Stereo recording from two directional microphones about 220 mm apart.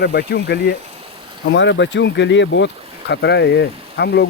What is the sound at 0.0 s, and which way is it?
Speech, 45° left (ahead or behind).